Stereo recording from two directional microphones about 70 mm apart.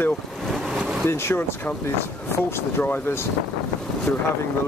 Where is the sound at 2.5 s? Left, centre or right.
Left.